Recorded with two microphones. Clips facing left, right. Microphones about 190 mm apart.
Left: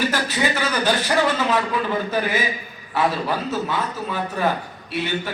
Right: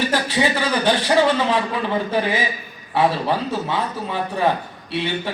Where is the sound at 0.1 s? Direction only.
30° right (ahead or behind).